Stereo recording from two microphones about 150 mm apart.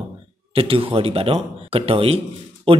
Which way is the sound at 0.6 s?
40° right (ahead or behind).